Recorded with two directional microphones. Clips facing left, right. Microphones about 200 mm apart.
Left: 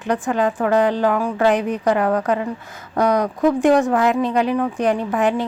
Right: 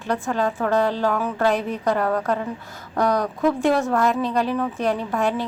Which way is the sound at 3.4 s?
15° left (ahead or behind).